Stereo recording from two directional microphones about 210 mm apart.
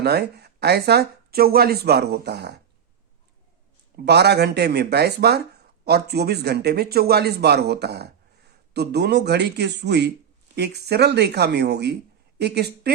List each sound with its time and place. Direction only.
0.0 s speech: 50° right (ahead or behind)
3.9 s a woman's voice: 50° right (ahead or behind)